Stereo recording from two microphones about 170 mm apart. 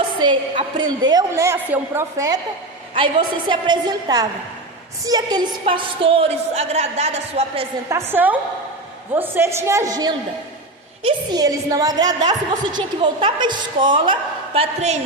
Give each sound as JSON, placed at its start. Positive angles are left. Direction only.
{"t": 0.2, "sound": "a woman's voice", "side_deg": -25}
{"t": 2.9, "sound": "a woman's voice", "side_deg": -30}
{"t": 7.9, "sound": "a woman's voice", "side_deg": -15}